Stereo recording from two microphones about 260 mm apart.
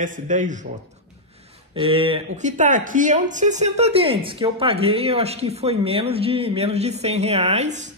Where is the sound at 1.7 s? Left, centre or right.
Right.